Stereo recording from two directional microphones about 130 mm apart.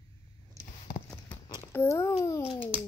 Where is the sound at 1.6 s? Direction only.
20° left (ahead or behind).